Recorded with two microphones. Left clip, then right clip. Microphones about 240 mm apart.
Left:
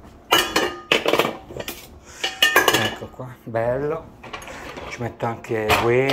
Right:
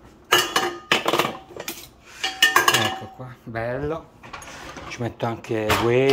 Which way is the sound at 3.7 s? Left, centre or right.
Right.